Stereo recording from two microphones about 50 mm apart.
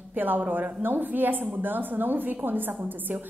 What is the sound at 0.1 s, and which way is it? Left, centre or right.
A woman's voice, right.